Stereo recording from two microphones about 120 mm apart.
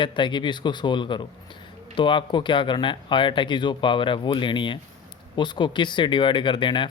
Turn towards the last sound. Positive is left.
turn(degrees=40)  # may be behind; listen again after turning